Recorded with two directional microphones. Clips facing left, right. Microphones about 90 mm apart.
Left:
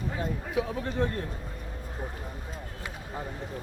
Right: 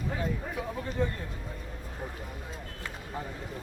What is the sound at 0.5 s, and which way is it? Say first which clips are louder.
Speech: left 4 dB; 70° left (ahead or behind).